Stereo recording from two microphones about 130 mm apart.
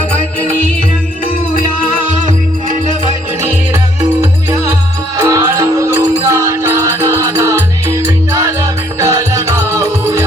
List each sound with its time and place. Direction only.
2.0 s music: 70° right (ahead or behind)
4.2 s music: 20° right (ahead or behind)